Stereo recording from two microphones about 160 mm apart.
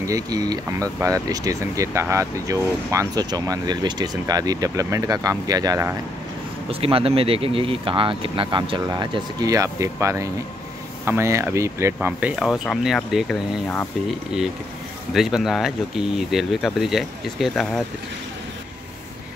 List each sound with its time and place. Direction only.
0.0 s speech: 20° right (ahead or behind)
6.7 s speech: 35° right (ahead or behind); by 12.1 s 15° right (ahead or behind)
12.1 s speech: 5° right (ahead or behind)
15.1 s speech: centre (ahead or behind)